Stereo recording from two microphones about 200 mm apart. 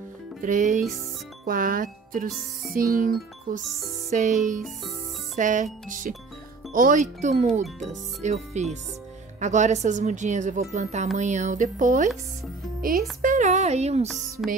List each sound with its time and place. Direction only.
0.4 s speech: 40° right (ahead or behind)
7.6 s speech: centre (ahead or behind)
8.2 s speech: 35° right (ahead or behind)